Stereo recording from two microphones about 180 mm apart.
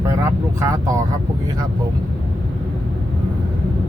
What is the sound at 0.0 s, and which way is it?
Vehicle, 15° right (ahead or behind).